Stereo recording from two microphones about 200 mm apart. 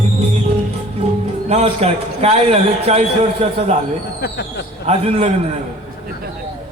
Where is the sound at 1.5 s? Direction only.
30° right (ahead or behind).